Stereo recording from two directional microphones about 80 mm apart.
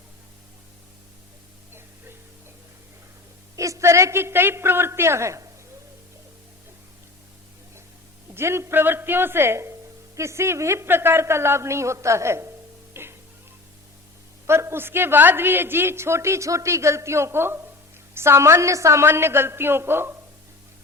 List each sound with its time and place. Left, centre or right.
3.5 s a woman's voice: right
8.4 s a woman's voice: right
12.9 s music: right
14.4 s a woman's voice: right